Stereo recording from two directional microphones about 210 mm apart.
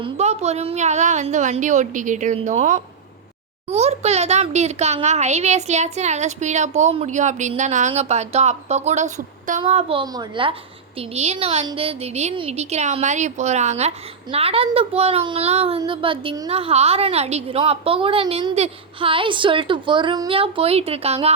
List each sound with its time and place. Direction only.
0.0 s a child's voice: 30° right (ahead or behind)